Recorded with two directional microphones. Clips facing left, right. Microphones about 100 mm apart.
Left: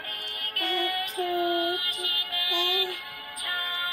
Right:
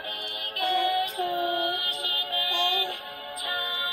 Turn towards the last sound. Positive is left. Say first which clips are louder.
# right 1 dB
turn(degrees=-20)  # may be behind; listen again after turning